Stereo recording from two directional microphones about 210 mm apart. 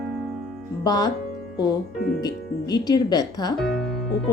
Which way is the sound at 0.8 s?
20° left (ahead or behind).